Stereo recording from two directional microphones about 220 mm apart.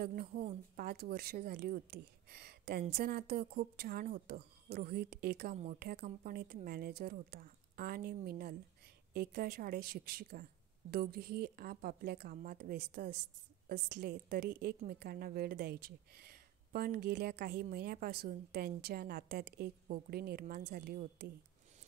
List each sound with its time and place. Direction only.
0.0 s speech: 45° right (ahead or behind)
0.4 s a woman's voice: 30° right (ahead or behind)
0.8 s speech: 45° right (ahead or behind)